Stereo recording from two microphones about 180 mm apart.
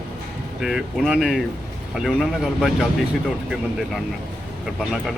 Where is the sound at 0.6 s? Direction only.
Centre (ahead or behind).